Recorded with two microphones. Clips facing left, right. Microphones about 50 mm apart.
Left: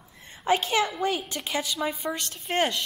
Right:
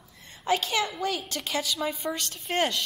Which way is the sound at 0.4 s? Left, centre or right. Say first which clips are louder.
Left 2 dB; left.